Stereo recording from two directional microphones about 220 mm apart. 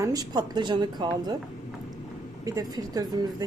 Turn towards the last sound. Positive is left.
turn(degrees=-20)  # may be behind; listen again after turning